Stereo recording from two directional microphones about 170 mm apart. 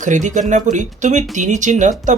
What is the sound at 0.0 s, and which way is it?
Speech, 45° right (ahead or behind).